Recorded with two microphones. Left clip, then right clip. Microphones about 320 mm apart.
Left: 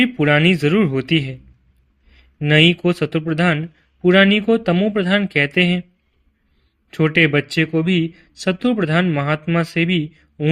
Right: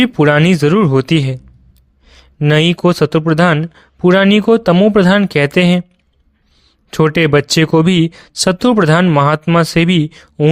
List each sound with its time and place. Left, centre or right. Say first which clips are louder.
0.0 s speech: right 4 dB; right
2.5 s speech: right 2 dB; right
7.0 s speech: right 4 dB; right